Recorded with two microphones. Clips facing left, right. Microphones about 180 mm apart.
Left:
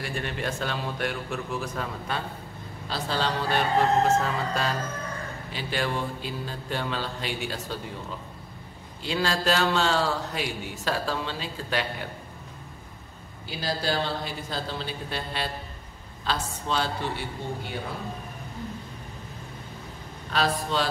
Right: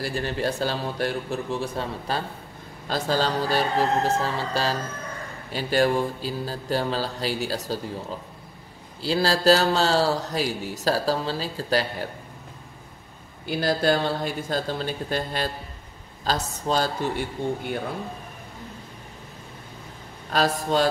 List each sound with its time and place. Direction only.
0.0 s a man's voice: 35° right (ahead or behind)
5.5 s a man's voice: 40° right (ahead or behind)
9.0 s a man's voice: 35° right (ahead or behind)
13.5 s a man's voice: 55° right (ahead or behind)
20.2 s speech: 45° right (ahead or behind)